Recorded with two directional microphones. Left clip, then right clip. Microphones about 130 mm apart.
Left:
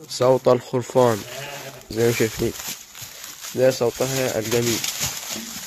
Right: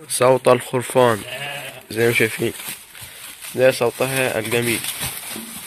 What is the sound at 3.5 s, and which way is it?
Speech, 15° left (ahead or behind).